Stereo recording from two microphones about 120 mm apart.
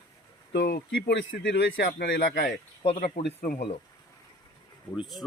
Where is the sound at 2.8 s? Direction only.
55° left (ahead or behind).